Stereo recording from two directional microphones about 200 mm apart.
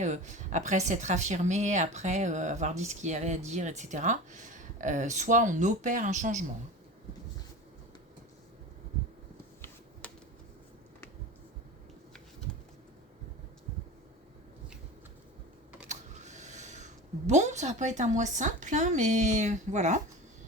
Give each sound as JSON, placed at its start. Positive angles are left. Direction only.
{"t": 0.0, "sound": "speech", "side_deg": -35}
{"t": 12.5, "sound": "bird", "side_deg": 5}
{"t": 15.9, "sound": "speech", "side_deg": -35}